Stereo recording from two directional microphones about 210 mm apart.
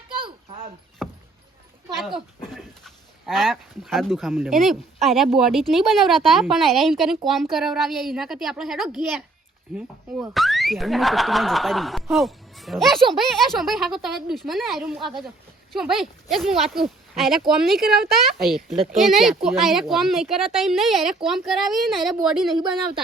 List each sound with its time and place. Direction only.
0.1 s a sound: 25° right (ahead or behind)
1.0 s rowboat: centre (ahead or behind)
2.4 s speech: centre (ahead or behind)
10.3 s speech: centre (ahead or behind)